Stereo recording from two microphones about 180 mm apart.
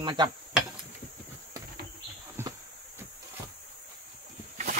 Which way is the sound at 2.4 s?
15° right (ahead or behind).